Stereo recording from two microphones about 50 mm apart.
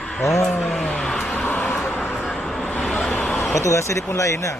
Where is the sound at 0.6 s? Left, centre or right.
Left.